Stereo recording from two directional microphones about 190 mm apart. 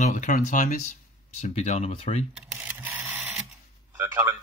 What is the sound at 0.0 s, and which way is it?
Speech, 40° left (ahead or behind).